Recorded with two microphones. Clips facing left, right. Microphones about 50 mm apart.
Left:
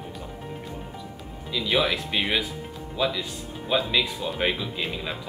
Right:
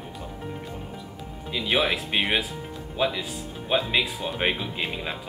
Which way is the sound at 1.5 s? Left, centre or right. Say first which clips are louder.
Even; right.